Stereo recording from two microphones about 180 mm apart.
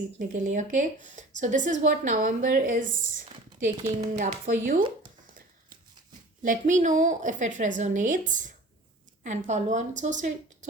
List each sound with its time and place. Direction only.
0.2 s a woman's voice: 45° right (ahead or behind)
6.4 s a woman's voice: 45° right (ahead or behind)